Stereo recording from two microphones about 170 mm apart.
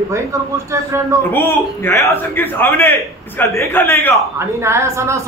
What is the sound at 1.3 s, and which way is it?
A man's voice, 15° left (ahead or behind).